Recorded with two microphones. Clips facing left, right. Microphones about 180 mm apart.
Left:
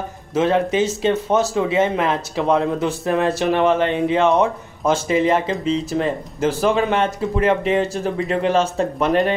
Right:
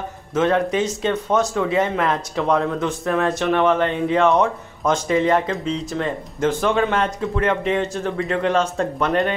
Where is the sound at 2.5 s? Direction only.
10° left (ahead or behind).